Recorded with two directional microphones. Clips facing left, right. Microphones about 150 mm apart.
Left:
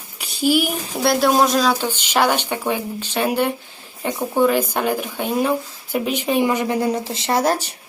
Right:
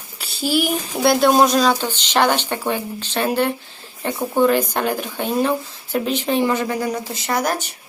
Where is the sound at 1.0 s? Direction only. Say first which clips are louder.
Right 2 dB; centre (ahead or behind).